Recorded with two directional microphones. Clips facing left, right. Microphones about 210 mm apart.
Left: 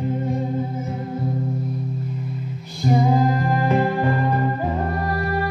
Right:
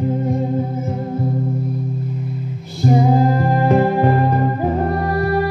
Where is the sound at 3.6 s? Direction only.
50° right (ahead or behind).